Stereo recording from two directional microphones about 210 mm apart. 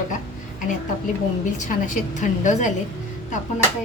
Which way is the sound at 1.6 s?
35° left (ahead or behind).